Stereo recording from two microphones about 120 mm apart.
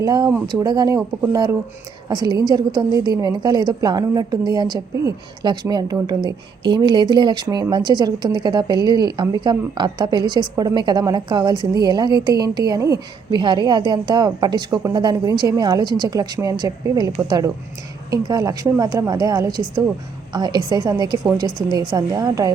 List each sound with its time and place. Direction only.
0.0 s a woman's voice: 35° right (ahead or behind)
10.5 s speech: 25° right (ahead or behind)
10.8 s a woman's voice: 35° right (ahead or behind)